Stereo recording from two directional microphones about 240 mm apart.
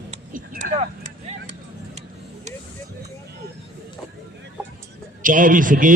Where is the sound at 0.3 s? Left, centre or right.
Right.